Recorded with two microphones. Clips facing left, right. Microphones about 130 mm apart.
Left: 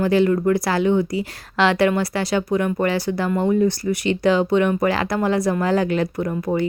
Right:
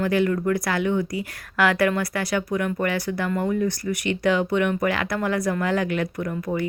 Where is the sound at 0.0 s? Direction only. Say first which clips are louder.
Left 4 dB; 30° left (ahead or behind).